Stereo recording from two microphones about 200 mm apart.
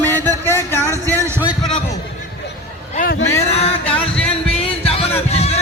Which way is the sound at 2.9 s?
45° left (ahead or behind).